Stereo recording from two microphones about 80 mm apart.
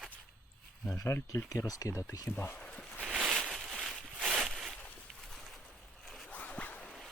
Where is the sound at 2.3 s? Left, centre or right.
Left.